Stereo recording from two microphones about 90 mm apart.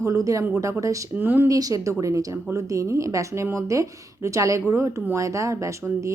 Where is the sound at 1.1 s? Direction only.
20° right (ahead or behind).